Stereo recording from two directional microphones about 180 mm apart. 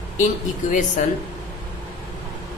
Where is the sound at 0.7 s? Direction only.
45° left (ahead or behind).